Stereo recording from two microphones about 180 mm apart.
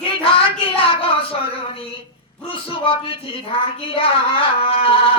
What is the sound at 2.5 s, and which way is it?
Speech, 30° left (ahead or behind).